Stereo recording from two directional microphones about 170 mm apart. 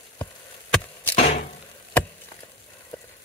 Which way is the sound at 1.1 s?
35° left (ahead or behind).